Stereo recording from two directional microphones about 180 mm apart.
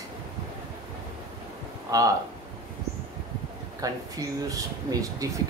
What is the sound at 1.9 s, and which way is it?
Speech, 20° right (ahead or behind).